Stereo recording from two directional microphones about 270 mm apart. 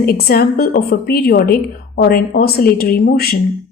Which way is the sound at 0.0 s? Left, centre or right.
Left.